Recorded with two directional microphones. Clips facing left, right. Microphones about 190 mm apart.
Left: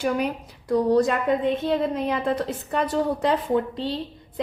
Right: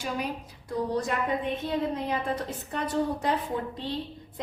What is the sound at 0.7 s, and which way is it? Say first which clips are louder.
A woman's voice: left 9 dB; 85° left.